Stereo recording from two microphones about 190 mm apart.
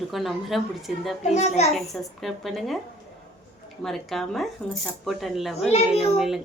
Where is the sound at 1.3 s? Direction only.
35° left (ahead or behind).